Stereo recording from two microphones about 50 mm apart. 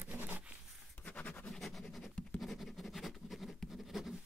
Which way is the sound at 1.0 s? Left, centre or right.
Left.